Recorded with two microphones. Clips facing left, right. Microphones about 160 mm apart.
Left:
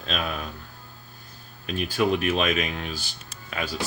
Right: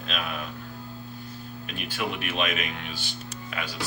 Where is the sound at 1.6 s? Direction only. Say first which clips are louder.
Left 8 dB; 40° left (ahead or behind).